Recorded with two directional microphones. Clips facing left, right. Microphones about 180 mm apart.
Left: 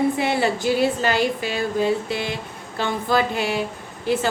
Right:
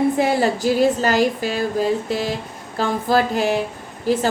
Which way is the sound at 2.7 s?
40° right (ahead or behind).